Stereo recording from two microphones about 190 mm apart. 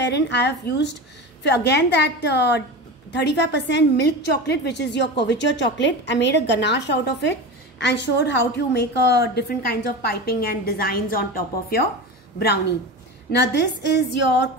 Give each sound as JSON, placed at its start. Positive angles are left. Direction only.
{"t": 0.0, "sound": "a woman's voice", "side_deg": 65}
{"t": 13.3, "sound": "a woman's voice", "side_deg": 65}